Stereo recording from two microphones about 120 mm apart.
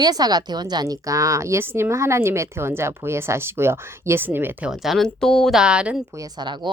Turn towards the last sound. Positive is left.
turn(degrees=-40)  # may be behind; listen again after turning